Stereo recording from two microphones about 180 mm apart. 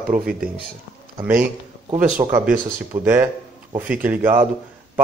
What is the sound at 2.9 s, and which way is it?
A man's voice, 10° right (ahead or behind).